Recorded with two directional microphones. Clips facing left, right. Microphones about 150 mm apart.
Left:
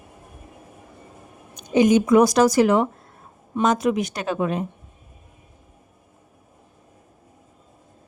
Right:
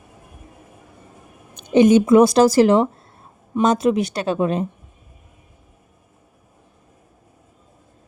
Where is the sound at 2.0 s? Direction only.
25° right (ahead or behind).